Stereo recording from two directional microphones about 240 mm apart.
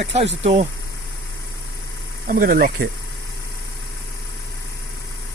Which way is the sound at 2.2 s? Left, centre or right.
Right.